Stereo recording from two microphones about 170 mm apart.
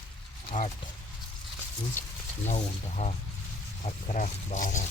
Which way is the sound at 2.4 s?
40° left (ahead or behind).